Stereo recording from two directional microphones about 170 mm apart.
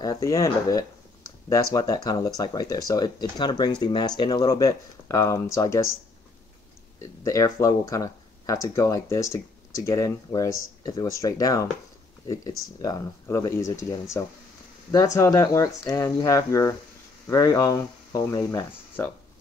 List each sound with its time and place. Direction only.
0.0 s speech: 20° left (ahead or behind)
7.0 s speech: 20° left (ahead or behind)
15.1 s speech: 20° left (ahead or behind)